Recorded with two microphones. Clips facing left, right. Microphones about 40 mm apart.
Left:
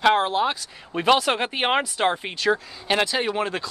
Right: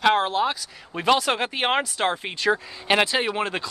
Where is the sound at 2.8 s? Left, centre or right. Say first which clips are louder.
Right 2 dB; centre.